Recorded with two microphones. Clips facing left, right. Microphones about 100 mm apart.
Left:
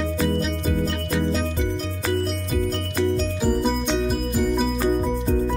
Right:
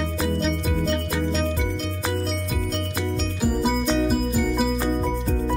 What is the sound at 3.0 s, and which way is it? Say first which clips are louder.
Music: left 6 dB; 5° right (ahead or behind).